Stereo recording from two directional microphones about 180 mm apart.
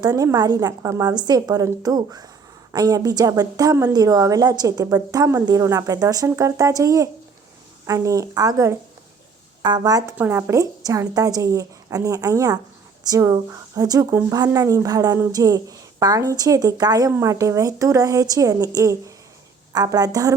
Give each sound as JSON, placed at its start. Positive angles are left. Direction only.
{"t": 0.0, "sound": "a woman's voice", "side_deg": -20}